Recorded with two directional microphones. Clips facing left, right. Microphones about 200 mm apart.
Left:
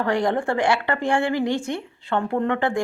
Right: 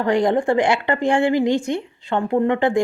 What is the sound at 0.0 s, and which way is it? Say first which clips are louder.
Speech: right 4 dB; 20° right (ahead or behind).